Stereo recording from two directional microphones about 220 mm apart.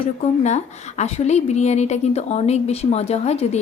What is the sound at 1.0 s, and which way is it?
A woman's voice, 30° left (ahead or behind).